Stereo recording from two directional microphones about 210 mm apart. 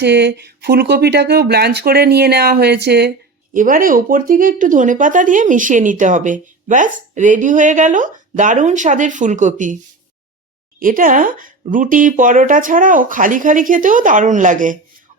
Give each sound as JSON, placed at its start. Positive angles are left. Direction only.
{"t": 0.0, "sound": "speech", "side_deg": -55}
{"t": 3.5, "sound": "speech", "side_deg": -40}
{"t": 10.8, "sound": "speech", "side_deg": -40}